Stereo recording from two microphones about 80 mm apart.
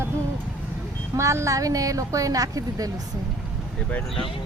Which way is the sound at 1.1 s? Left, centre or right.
Right.